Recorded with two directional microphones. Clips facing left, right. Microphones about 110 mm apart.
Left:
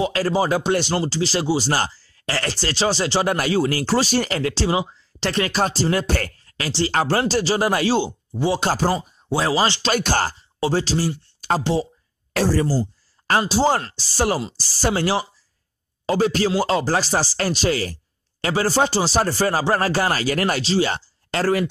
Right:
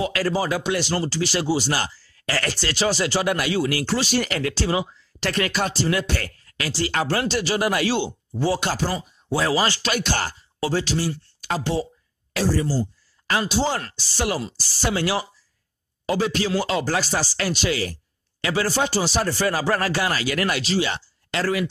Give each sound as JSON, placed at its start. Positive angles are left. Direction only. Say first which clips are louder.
{"t": 0.0, "sound": "speech", "louder": "left 3 dB", "side_deg": 30}
{"t": 9.9, "sound": "speech", "louder": "left 4 dB", "side_deg": 40}
{"t": 13.3, "sound": "speech", "louder": "left 4 dB", "side_deg": 35}